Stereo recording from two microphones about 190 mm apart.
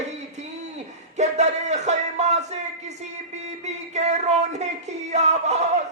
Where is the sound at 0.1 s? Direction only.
35° right (ahead or behind).